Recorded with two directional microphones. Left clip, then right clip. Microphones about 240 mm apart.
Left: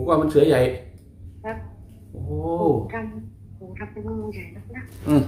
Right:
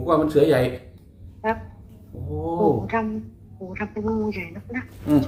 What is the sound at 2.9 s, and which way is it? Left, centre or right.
Speech, right.